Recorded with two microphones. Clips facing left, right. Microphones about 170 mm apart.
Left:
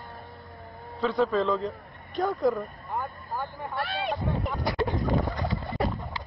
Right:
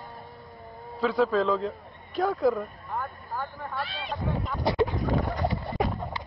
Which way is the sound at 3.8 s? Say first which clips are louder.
Left 5 dB; 60° left (ahead or behind).